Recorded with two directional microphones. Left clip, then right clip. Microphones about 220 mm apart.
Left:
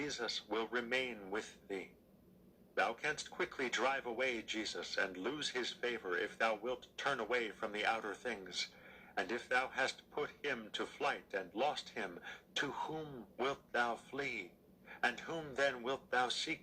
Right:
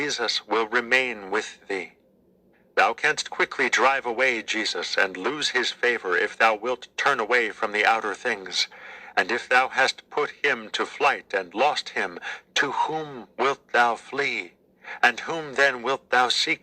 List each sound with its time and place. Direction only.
0.0 s speech: 35° right (ahead or behind)